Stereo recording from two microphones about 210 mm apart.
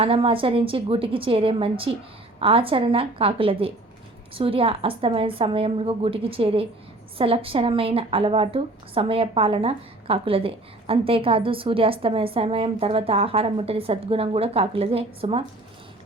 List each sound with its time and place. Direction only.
0.0 s a woman's voice: 25° right (ahead or behind)